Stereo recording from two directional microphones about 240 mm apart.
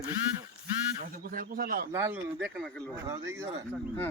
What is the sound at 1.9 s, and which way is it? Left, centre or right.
Speech, centre.